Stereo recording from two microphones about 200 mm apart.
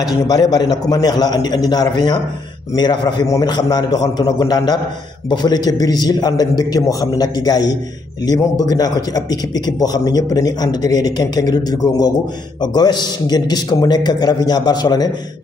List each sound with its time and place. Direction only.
0.0 s a man's voice: 20° left (ahead or behind)